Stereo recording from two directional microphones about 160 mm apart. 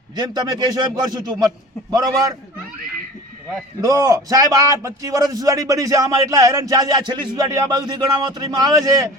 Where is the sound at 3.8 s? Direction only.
20° right (ahead or behind).